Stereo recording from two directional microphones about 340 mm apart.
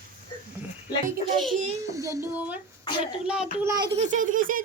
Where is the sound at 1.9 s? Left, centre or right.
Centre.